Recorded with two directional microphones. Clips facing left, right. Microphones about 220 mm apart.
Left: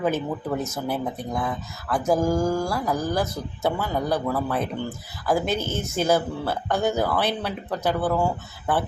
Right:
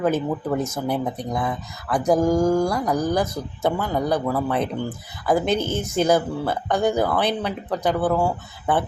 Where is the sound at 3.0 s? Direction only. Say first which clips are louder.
Right 5 dB; 15° right (ahead or behind).